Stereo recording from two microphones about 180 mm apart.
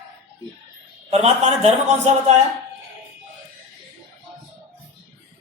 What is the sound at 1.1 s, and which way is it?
Speech, 35° right (ahead or behind).